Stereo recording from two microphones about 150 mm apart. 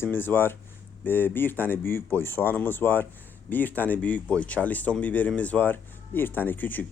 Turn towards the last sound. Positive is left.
turn(degrees=10)  # may be behind; listen again after turning